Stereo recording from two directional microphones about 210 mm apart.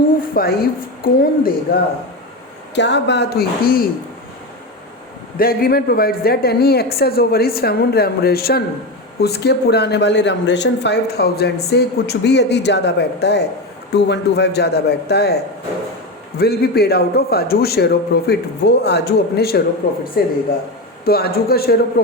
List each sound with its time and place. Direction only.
0.3 s speech: 45° left (ahead or behind)
2.7 s speech: 55° left (ahead or behind)
5.4 s speech: 45° left (ahead or behind)
16.4 s speech: 50° left (ahead or behind)
21.0 s speech: 45° left (ahead or behind)